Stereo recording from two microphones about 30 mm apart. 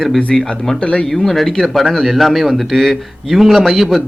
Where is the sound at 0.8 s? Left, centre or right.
Left.